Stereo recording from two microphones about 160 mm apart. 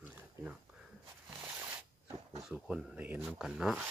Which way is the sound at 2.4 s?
5° right (ahead or behind).